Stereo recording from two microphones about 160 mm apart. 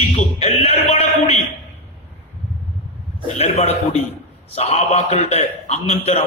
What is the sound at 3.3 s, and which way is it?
A man's voice, 40° left (ahead or behind).